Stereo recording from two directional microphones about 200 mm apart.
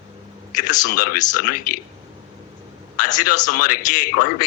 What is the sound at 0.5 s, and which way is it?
Speech, 40° left (ahead or behind).